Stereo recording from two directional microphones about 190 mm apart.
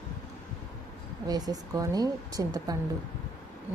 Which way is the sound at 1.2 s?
20° right (ahead or behind).